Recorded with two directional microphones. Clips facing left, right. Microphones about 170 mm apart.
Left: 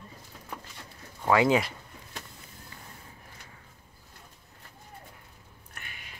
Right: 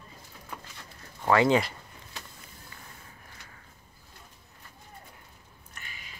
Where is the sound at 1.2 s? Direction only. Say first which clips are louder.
Even; 10° left (ahead or behind).